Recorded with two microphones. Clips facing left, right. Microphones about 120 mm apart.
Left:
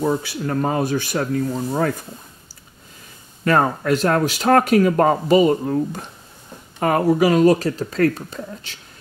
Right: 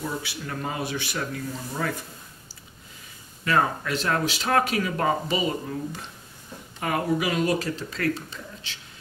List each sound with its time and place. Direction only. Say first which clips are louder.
0.0 s speech: left 11 dB; 45° left (ahead or behind)
3.4 s speech: left 7 dB; 45° left (ahead or behind)